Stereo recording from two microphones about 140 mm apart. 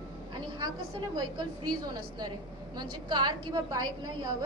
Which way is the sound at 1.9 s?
30° right (ahead or behind).